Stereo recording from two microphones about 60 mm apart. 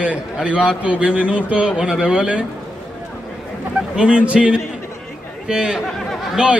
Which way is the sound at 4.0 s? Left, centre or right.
Centre.